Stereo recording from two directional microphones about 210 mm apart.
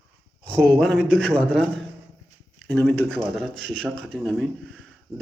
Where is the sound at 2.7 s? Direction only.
5° left (ahead or behind).